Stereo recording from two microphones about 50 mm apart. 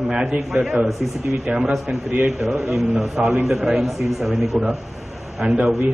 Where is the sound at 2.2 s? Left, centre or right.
Centre.